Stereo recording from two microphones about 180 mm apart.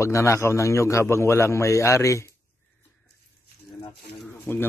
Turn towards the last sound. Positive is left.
turn(degrees=10)  # may be behind; listen again after turning